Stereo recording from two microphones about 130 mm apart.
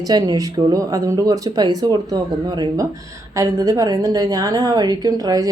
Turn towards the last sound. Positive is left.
turn(degrees=-30)  # may be behind; listen again after turning